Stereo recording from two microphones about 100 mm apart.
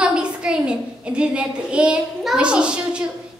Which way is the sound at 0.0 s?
10° right (ahead or behind).